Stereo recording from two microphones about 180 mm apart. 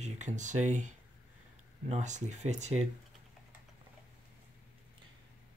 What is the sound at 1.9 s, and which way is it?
Speech, 40° right (ahead or behind).